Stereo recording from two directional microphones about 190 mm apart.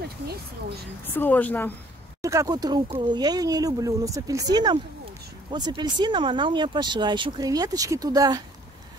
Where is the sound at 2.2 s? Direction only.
20° right (ahead or behind).